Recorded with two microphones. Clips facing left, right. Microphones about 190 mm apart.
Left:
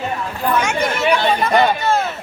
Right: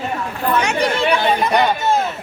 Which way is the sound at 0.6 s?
35° right (ahead or behind).